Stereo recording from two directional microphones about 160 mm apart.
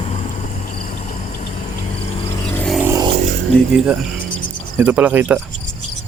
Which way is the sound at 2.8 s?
20° right (ahead or behind).